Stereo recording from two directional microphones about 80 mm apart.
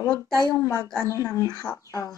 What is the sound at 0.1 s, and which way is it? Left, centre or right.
Speech, right.